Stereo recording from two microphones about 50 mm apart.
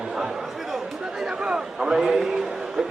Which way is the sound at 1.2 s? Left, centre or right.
Centre.